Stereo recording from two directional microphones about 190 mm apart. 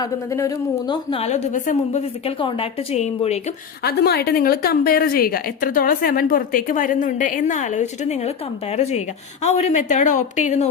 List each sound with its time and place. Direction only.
0.0 s a woman's voice: 15° left (ahead or behind)
1.1 s a woman's voice: 35° left (ahead or behind)
3.8 s a woman's voice: 55° left (ahead or behind); by 10.7 s 40° left (ahead or behind)